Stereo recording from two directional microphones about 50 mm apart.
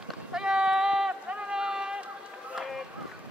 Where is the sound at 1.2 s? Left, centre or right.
Right.